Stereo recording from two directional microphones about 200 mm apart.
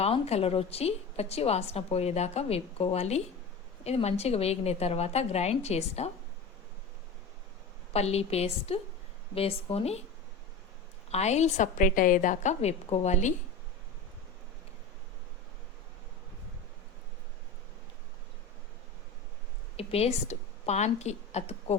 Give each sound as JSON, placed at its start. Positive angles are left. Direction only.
{"t": 0.0, "sound": "a woman's voice", "side_deg": 30}
{"t": 7.9, "sound": "a woman's voice", "side_deg": 30}
{"t": 11.1, "sound": "a woman's voice", "side_deg": 35}
{"t": 19.7, "sound": "a woman's voice", "side_deg": 30}